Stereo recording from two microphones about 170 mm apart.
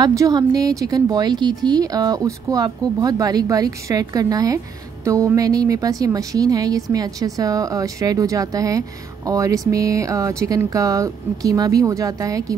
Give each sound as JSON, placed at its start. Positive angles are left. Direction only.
{"t": 0.0, "sound": "speech", "side_deg": -20}